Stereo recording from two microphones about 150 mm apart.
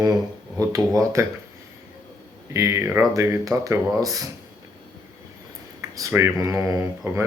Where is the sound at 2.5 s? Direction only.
20° right (ahead or behind).